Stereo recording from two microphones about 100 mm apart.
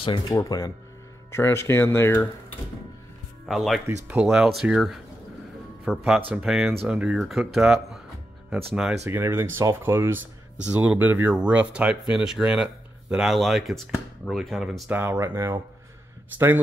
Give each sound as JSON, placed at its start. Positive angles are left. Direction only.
{"t": 0.3, "sound": "speech", "side_deg": 35}
{"t": 1.3, "sound": "speech", "side_deg": 25}
{"t": 3.4, "sound": "speech", "side_deg": 0}
{"t": 6.3, "sound": "speech", "side_deg": -5}
{"t": 9.0, "sound": "speech", "side_deg": -25}
{"t": 14.9, "sound": "speech", "side_deg": -20}